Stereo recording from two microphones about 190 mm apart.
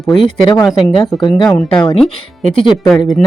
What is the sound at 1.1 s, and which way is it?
Speech, centre (ahead or behind).